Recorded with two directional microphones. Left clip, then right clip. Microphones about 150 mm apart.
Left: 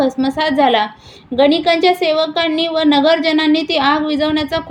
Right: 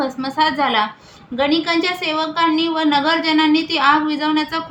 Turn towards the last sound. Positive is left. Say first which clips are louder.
# left 2 dB
turn(degrees=25)  # may be behind; listen again after turning